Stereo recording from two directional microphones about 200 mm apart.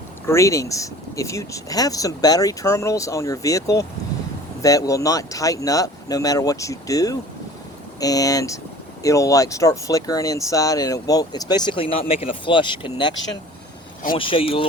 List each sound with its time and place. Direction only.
0.3 s speech: 15° left (ahead or behind)